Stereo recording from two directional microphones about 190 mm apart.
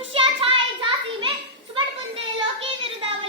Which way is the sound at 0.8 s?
25° right (ahead or behind).